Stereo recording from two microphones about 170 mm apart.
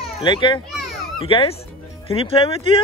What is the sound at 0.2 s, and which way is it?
A child's voice, 30° left (ahead or behind).